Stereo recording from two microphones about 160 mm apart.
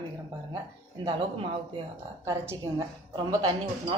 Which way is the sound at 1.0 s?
30° right (ahead or behind).